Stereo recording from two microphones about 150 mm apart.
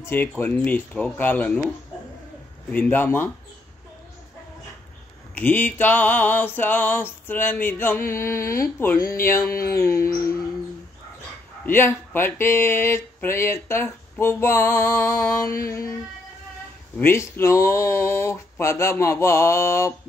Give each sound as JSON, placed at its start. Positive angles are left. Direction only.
{"t": 0.0, "sound": "speech", "side_deg": 15}
{"t": 2.7, "sound": "speech", "side_deg": 10}
{"t": 5.3, "sound": "speech", "side_deg": 10}
{"t": 11.6, "sound": "speech", "side_deg": 15}
{"t": 17.0, "sound": "speech", "side_deg": 15}